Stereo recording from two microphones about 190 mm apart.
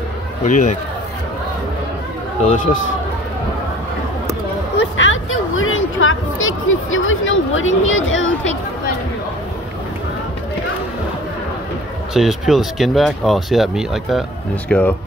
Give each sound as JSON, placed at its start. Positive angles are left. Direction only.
{"t": 0.5, "sound": "speech", "side_deg": 40}
{"t": 2.4, "sound": "speech", "side_deg": 45}
{"t": 4.7, "sound": "a sound", "side_deg": 80}
{"t": 12.1, "sound": "speech", "side_deg": 0}